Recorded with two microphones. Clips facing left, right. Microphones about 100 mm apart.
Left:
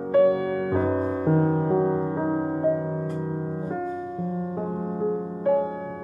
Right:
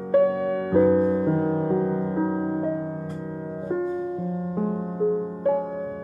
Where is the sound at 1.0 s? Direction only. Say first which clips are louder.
Right 1 dB; 25° left (ahead or behind).